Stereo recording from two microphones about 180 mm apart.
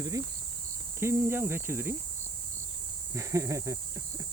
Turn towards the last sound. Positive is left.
turn(degrees=-15)  # may be behind; listen again after turning